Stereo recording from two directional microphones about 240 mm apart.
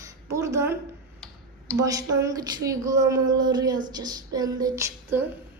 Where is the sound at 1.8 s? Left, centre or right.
Centre.